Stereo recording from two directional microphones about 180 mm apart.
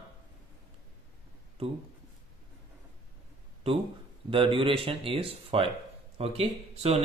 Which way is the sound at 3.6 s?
35° right (ahead or behind).